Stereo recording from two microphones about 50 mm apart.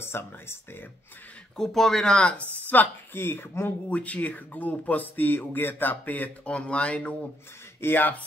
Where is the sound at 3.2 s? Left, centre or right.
Left.